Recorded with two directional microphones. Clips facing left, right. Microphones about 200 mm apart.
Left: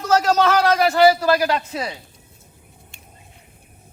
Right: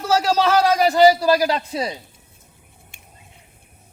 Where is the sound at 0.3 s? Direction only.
10° right (ahead or behind).